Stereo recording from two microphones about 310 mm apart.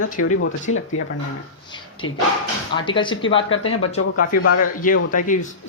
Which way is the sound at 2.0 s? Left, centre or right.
Left.